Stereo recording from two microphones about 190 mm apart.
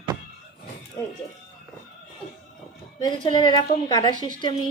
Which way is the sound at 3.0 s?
20° left (ahead or behind).